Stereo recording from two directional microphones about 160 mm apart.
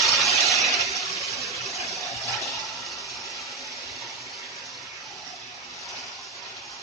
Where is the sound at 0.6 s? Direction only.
20° left (ahead or behind).